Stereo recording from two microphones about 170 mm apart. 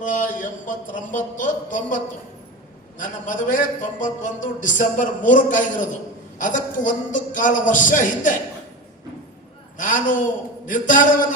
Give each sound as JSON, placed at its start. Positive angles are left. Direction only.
{"t": 0.0, "sound": "a man's voice", "side_deg": 50}
{"t": 3.0, "sound": "a man's voice", "side_deg": 50}
{"t": 9.7, "sound": "a man's voice", "side_deg": 50}